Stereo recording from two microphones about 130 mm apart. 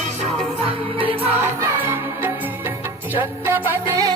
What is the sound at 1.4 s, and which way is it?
Music, 20° right (ahead or behind).